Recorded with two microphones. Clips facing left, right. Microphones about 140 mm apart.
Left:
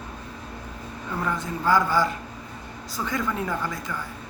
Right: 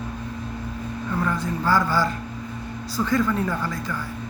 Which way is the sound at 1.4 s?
15° left (ahead or behind).